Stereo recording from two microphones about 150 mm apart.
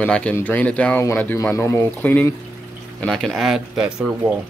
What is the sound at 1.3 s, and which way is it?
Speech, 20° left (ahead or behind).